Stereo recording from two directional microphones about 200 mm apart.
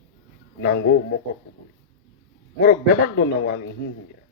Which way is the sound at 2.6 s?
55° left (ahead or behind).